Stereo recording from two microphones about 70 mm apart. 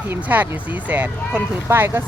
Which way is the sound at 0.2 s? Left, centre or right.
Right.